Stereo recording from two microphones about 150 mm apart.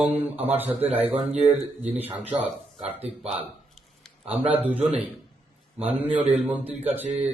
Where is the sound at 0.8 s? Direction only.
45° right (ahead or behind).